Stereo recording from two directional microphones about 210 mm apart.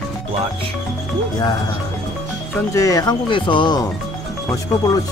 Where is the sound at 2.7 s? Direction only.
15° left (ahead or behind).